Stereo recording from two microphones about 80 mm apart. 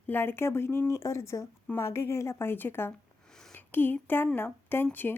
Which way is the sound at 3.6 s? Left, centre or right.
Left.